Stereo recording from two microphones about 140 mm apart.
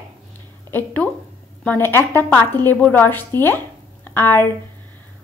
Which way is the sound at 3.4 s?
15° left (ahead or behind).